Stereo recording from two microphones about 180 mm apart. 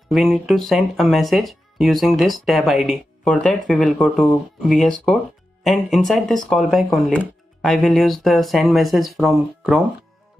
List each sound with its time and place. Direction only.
0.1 s speech: centre (ahead or behind)